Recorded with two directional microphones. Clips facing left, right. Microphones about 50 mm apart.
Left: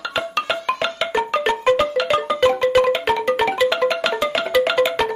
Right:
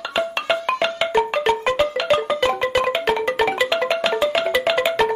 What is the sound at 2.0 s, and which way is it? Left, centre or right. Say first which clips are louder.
Music: left 1 dB; centre.